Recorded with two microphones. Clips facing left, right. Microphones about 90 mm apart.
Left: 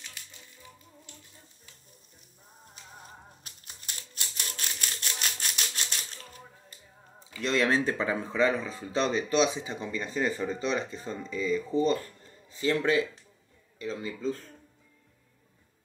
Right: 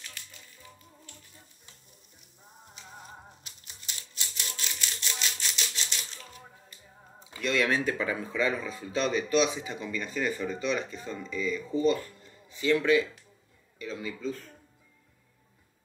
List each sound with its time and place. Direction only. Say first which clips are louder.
3.4 s music: left 1 dB; 45° left (ahead or behind)
7.4 s speech: left 1 dB; 30° left (ahead or behind)